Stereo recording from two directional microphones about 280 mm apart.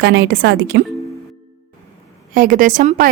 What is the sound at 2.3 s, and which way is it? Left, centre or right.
Speech, right.